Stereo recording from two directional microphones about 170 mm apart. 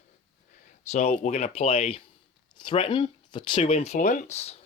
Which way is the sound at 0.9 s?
40° left (ahead or behind).